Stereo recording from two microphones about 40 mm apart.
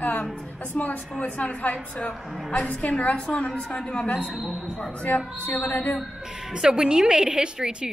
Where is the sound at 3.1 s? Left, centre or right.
Left.